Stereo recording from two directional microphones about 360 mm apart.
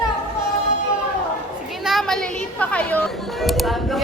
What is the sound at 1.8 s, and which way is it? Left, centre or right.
Chatter, centre.